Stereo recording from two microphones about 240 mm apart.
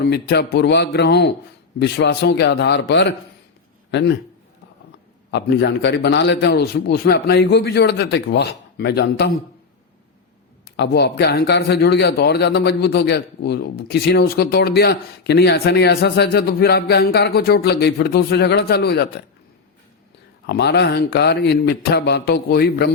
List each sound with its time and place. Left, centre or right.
0.1 s a man's voice: left
5.3 s a man's voice: left
10.8 s a man's voice: left
20.5 s a man's voice: left